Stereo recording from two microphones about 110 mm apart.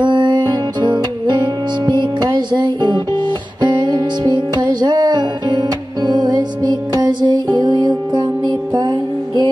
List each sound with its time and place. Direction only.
0.0 s music: 45° right (ahead or behind)